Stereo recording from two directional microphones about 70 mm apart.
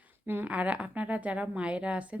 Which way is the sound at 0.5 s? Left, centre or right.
Centre.